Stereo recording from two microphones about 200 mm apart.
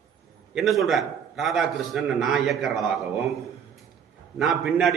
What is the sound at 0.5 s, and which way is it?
A man's voice, centre (ahead or behind).